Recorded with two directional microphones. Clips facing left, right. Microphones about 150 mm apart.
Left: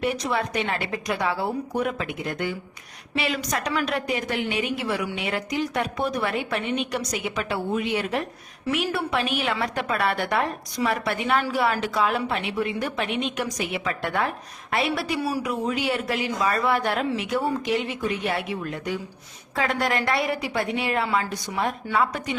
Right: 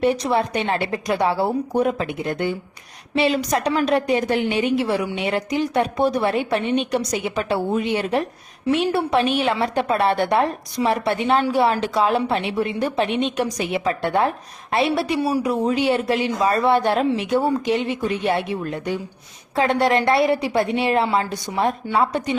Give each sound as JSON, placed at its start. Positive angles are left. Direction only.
{"t": 0.0, "sound": "a woman's voice", "side_deg": -30}